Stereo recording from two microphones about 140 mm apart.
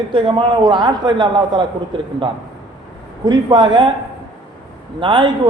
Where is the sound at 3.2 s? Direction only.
30° right (ahead or behind).